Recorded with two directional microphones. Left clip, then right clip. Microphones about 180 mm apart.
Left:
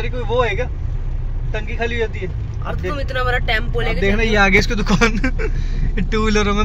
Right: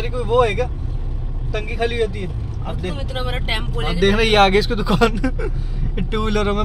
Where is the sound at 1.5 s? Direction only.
15° right (ahead or behind).